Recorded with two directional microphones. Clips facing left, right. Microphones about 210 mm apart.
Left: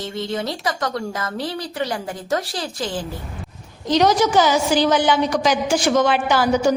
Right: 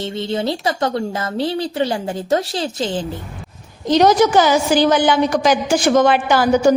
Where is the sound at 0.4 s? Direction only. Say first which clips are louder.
Right 5 dB; 25° right (ahead or behind).